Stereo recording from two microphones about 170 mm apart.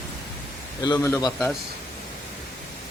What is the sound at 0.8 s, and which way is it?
Speech, 20° left (ahead or behind).